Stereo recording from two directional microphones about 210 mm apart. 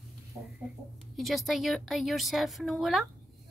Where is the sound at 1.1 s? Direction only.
Centre (ahead or behind).